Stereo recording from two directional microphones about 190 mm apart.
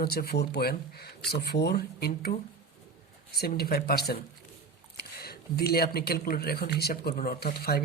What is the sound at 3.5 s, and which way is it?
Speech, 55° left (ahead or behind).